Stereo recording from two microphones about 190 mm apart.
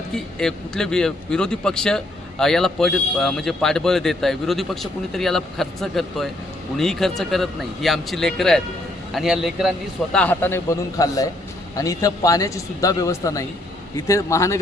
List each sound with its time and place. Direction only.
0.1 s a man's voice: 5° left (ahead or behind)